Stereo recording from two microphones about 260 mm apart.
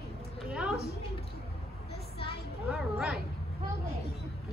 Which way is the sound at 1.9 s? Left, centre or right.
Left.